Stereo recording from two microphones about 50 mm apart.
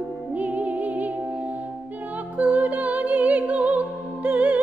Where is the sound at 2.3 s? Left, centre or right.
Right.